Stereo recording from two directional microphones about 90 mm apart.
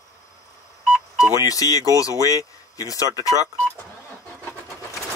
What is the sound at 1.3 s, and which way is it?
Speech, 40° left (ahead or behind).